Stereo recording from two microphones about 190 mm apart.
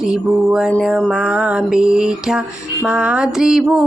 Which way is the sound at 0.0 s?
5° right (ahead or behind).